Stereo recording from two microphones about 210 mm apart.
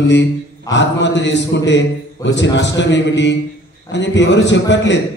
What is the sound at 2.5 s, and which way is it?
A man's voice, 55° left (ahead or behind).